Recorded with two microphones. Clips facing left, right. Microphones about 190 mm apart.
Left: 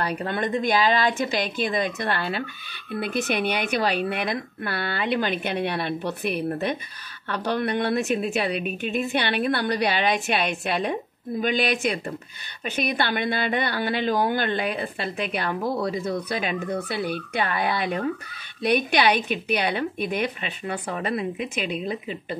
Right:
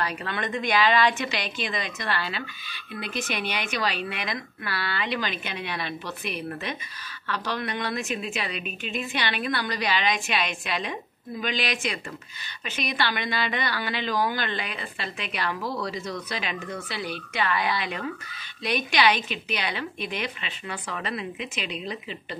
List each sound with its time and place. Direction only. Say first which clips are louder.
0.2 s speech: left 5 dB; 30° left (ahead or behind)
0.7 s a woman's voice: right 2 dB; 45° left (ahead or behind)